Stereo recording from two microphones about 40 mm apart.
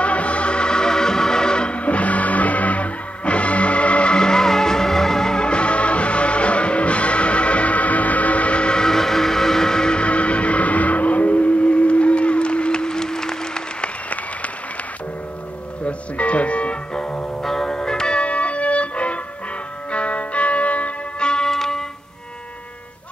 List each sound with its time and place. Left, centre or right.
0.0 s music: left
8.8 s vehicle: centre
10.0 s vehicle: left; by 13.4 s centre
16.2 s music: left
17.4 s music: centre
18.2 s music: left
21.3 s music: centre